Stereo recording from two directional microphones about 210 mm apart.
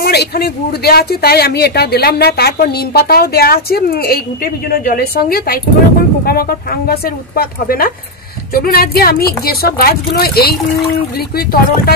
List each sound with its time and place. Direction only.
0.0 s speech: 50° left (ahead or behind)